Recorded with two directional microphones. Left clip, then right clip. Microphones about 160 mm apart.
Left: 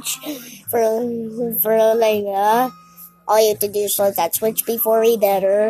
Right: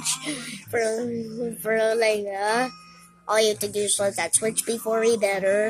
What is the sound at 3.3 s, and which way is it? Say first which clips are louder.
Speech: left 6 dB; 15° left (ahead or behind).